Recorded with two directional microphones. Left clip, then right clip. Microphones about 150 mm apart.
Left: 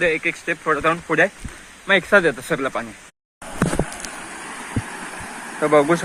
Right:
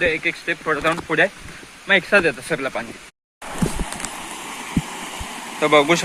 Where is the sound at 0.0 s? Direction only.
25° left (ahead or behind).